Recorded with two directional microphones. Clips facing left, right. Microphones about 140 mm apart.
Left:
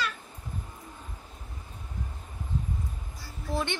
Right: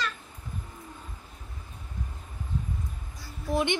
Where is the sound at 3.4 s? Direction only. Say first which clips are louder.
Right 4 dB; 20° right (ahead or behind).